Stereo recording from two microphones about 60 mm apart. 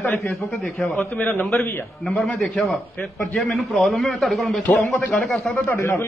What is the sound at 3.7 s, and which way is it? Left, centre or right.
Speech, centre.